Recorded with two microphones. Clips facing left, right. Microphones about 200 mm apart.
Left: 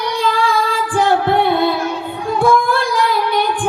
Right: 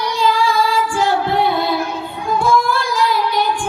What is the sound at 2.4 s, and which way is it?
Child singing, 55° left (ahead or behind).